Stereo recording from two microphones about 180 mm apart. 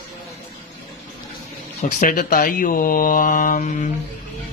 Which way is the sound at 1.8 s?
45° left (ahead or behind).